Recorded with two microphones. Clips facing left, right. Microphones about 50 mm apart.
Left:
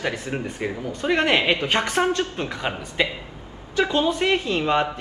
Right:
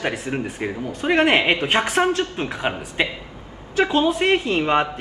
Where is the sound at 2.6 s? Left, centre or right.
Centre.